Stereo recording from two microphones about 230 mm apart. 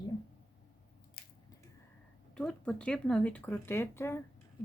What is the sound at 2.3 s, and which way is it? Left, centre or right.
Speech, centre.